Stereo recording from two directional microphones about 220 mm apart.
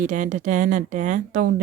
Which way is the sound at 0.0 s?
35° right (ahead or behind).